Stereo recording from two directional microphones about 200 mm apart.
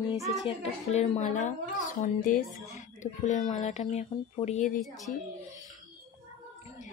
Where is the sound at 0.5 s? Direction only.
30° left (ahead or behind).